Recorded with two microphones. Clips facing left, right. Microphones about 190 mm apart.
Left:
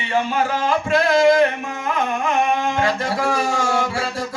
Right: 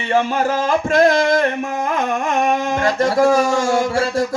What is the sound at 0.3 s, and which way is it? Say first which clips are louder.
Mantra: right 2 dB; 45° right (ahead or behind).